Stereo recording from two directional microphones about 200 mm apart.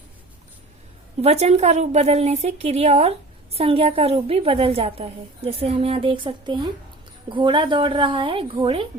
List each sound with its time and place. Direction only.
1.2 s a woman's voice: 30° right (ahead or behind)